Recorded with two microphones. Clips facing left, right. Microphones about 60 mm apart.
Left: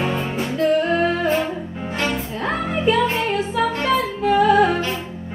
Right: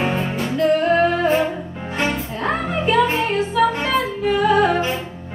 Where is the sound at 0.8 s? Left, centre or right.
Right.